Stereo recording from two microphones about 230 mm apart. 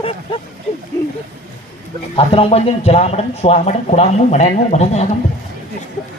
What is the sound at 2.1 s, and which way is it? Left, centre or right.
Speech, left.